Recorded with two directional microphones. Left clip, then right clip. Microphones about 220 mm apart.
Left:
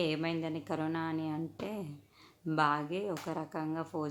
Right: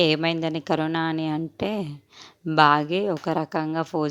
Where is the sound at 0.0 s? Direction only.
40° right (ahead or behind).